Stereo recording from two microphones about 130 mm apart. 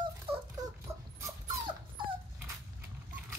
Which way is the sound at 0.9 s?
25° right (ahead or behind).